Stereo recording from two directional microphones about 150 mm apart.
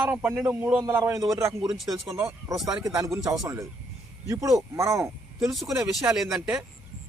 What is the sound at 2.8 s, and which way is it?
Speech, 20° right (ahead or behind).